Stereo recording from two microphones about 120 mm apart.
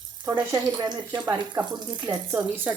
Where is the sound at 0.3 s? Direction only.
30° right (ahead or behind).